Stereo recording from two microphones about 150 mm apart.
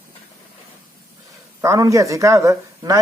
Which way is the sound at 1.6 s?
20° right (ahead or behind).